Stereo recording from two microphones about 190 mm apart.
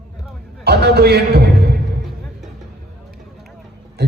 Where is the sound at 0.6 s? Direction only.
60° right (ahead or behind).